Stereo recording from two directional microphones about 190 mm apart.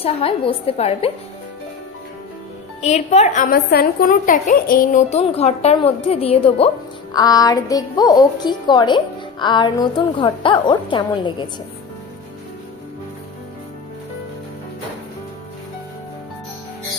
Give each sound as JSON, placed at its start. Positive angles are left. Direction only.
{"t": 0.0, "sound": "speech", "side_deg": 30}
{"t": 2.8, "sound": "speech", "side_deg": 35}
{"t": 3.4, "sound": "speech", "side_deg": 55}
{"t": 7.2, "sound": "a woman's voice", "side_deg": 20}